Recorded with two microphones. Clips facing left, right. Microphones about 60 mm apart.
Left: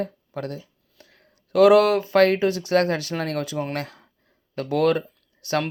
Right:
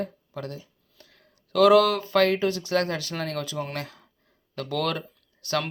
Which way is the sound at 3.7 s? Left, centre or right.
Left.